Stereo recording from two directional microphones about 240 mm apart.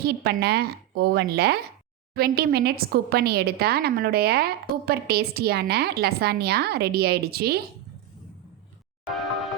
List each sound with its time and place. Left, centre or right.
0.0 s a woman's voice: right